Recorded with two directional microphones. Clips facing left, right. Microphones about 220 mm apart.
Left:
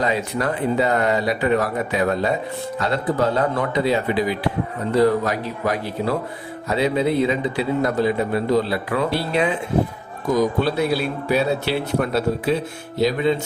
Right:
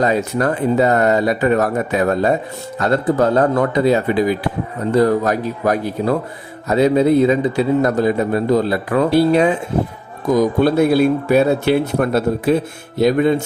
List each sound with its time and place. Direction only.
0.0 s a man's voice: 45° right (ahead or behind)
10.6 s a man's voice: 50° right (ahead or behind)